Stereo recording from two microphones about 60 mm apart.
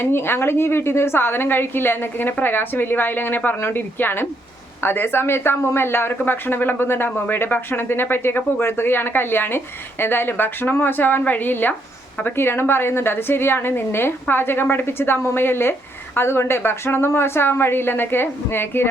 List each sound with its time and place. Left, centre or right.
0.0 s speech: left